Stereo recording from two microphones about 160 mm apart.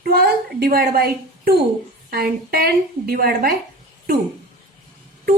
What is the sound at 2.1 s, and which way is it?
A woman's voice, 70° right (ahead or behind).